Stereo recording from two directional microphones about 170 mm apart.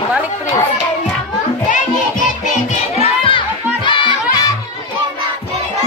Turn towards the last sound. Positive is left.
turn(degrees=30)  # may be behind; listen again after turning